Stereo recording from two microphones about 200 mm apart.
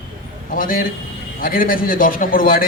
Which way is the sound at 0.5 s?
45° left (ahead or behind).